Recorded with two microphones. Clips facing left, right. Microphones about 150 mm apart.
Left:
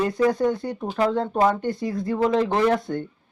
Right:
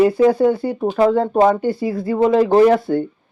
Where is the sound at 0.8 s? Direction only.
30° right (ahead or behind).